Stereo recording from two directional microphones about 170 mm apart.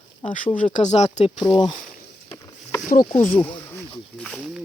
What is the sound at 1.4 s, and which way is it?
Speech, 25° left (ahead or behind).